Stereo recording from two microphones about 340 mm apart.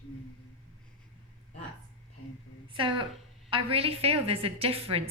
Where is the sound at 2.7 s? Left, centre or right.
Centre.